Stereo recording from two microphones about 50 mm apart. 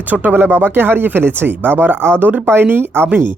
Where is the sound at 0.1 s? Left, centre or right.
Right.